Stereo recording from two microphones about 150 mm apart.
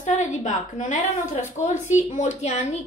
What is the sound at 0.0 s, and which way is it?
A woman's voice, 55° left (ahead or behind).